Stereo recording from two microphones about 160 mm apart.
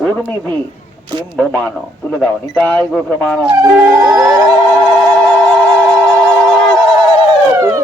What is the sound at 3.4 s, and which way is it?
Music, 20° right (ahead or behind).